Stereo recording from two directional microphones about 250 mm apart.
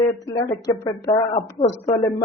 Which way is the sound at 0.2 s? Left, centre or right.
Centre.